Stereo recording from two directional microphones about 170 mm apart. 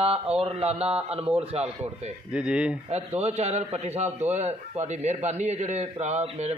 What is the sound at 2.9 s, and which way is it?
A man's voice, 40° right (ahead or behind).